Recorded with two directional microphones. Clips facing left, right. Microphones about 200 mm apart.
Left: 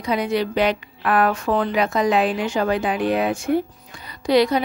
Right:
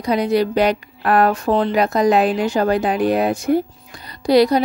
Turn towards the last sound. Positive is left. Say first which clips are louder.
# right 4 dB
turn(degrees=-35)  # may be behind; listen again after turning